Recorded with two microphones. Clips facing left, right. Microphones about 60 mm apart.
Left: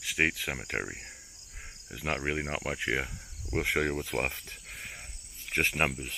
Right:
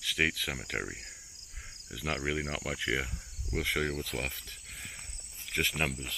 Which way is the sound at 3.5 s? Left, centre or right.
Left.